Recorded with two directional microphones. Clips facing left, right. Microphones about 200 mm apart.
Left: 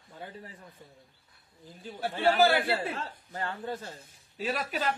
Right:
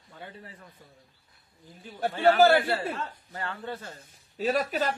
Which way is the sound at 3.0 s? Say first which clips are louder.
Even; 30° left (ahead or behind).